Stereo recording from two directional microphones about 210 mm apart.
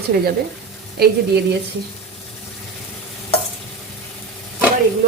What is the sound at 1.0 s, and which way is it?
Stir, 50° right (ahead or behind).